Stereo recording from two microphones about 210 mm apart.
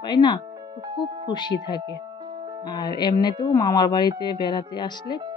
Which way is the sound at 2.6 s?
20° left (ahead or behind).